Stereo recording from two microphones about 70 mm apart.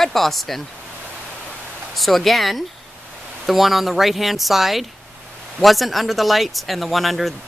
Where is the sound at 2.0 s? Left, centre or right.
Centre.